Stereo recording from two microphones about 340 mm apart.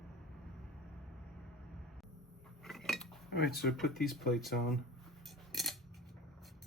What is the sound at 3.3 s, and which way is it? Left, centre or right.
Speech, left.